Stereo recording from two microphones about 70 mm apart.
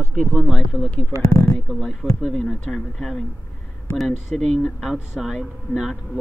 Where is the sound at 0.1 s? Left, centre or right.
Centre.